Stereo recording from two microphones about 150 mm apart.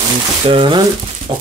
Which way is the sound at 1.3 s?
40° right (ahead or behind).